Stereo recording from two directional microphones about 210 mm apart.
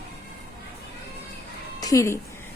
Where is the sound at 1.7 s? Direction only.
15° left (ahead or behind).